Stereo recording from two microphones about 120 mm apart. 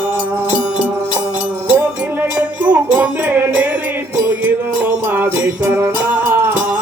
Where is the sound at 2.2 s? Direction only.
15° right (ahead or behind).